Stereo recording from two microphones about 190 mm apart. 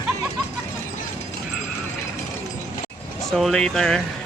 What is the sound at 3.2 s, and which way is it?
Speech, centre (ahead or behind).